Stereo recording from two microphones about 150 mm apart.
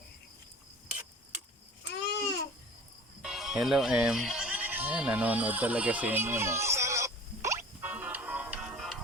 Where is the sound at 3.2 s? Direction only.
Centre (ahead or behind).